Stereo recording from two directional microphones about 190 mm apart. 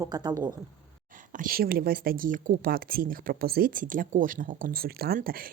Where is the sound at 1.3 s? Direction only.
50° right (ahead or behind).